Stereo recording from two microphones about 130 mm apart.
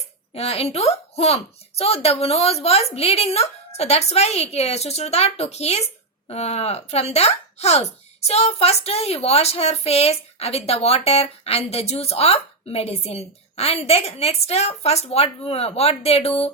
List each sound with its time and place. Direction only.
0.3 s a woman's voice: 50° left (ahead or behind)